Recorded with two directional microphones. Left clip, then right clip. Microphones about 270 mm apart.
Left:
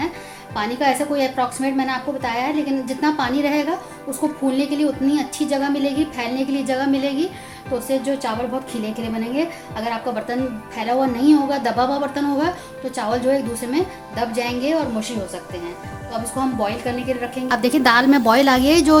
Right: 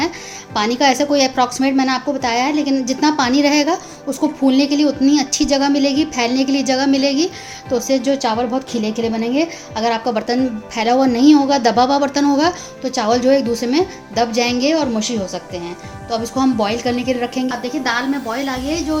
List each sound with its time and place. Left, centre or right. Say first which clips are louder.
0.5 s a woman's voice: right 5 dB; right
9.3 s a woman's voice: right 4 dB; right
17.5 s a woman's voice: left 4 dB; left